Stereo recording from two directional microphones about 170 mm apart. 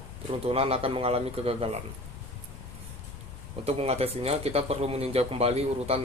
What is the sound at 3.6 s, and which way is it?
Speech, 35° right (ahead or behind).